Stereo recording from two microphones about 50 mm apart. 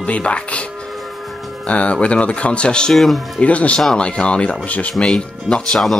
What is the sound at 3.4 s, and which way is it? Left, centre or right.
Speech, left.